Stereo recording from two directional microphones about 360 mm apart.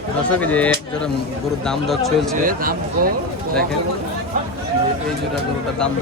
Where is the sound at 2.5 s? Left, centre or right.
Right.